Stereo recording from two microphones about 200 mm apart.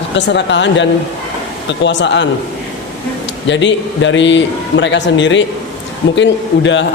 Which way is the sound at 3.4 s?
65° left (ahead or behind).